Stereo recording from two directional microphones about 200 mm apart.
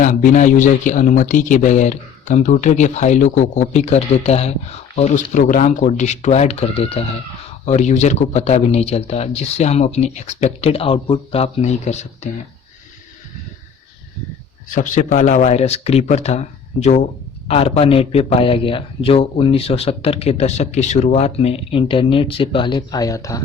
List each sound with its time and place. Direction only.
0.0 s a man's voice: 40° left (ahead or behind)
14.8 s a man's voice: 40° left (ahead or behind); by 23.4 s 15° left (ahead or behind)